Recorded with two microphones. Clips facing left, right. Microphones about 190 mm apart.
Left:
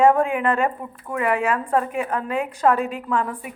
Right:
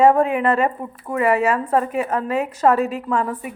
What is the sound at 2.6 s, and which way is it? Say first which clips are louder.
Speech: right 2 dB; 5° right (ahead or behind).